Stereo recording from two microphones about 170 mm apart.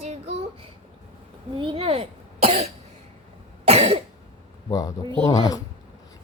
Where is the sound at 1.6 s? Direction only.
30° right (ahead or behind).